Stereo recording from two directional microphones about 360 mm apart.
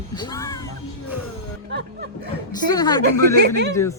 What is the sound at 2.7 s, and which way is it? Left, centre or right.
Speech, centre.